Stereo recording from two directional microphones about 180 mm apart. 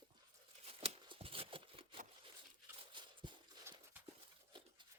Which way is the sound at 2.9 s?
25° right (ahead or behind).